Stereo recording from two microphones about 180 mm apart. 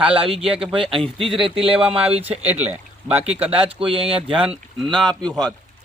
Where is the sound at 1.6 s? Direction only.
30° right (ahead or behind).